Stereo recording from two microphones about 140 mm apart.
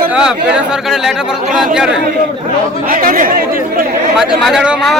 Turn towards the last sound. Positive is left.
turn(degrees=-5)  # may be behind; listen again after turning